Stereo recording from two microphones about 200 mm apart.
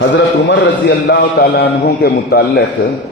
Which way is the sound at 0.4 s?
60° left (ahead or behind).